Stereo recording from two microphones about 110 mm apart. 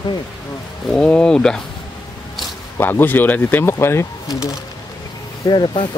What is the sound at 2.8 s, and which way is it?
Speech, 20° left (ahead or behind).